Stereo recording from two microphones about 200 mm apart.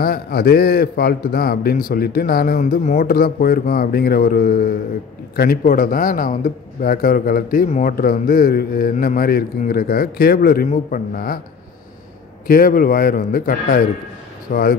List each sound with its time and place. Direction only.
0.0 s a man's voice: 50° left (ahead or behind)
12.4 s a man's voice: 45° left (ahead or behind)